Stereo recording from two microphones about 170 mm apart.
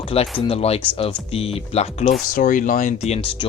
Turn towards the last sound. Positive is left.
turn(degrees=30)  # may be behind; listen again after turning